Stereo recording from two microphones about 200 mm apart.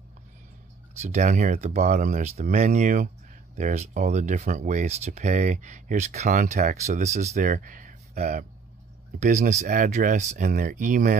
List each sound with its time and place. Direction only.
1.0 s speech: 35° right (ahead or behind)